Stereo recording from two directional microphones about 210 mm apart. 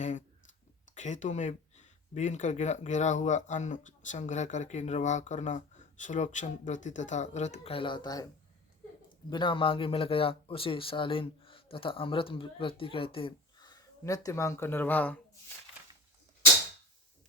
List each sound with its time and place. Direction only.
0.0 s a sound: 35° left (ahead or behind)
0.9 s speech: 35° left (ahead or behind); by 8.3 s 20° left (ahead or behind)
9.3 s speech: 25° left (ahead or behind); by 15.2 s 10° left (ahead or behind)